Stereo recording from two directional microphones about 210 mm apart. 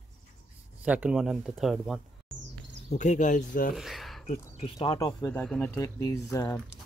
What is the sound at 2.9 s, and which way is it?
Speech, 35° left (ahead or behind).